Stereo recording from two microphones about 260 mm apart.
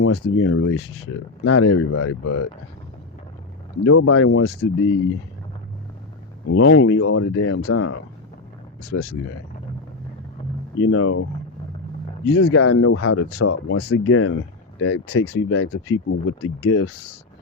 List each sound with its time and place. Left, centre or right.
0.0 s speech: left
3.8 s speech: left
6.5 s speech: left
10.8 s speech: left
12.2 s speech: left